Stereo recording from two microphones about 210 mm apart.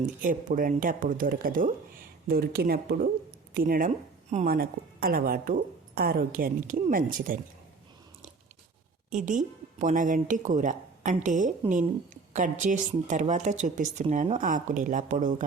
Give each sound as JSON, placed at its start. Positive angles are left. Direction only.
{"t": 0.2, "sound": "a woman's voice", "side_deg": -40}
{"t": 9.0, "sound": "a woman's voice", "side_deg": -35}